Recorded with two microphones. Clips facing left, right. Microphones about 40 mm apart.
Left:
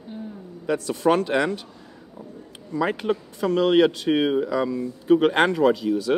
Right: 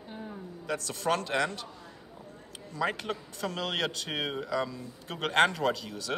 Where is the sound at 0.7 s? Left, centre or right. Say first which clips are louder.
Left 9 dB; centre.